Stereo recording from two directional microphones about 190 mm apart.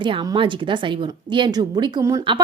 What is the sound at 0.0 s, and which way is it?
A woman's voice, 25° right (ahead or behind).